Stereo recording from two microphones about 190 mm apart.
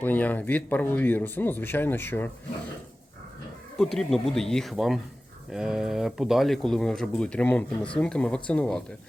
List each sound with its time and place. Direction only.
0.0 s speech: 10° left (ahead or behind)
3.8 s speech: centre (ahead or behind)